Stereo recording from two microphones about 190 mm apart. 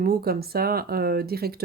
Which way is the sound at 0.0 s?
55° right (ahead or behind).